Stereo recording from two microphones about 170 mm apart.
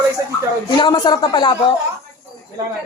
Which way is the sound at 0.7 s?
25° left (ahead or behind).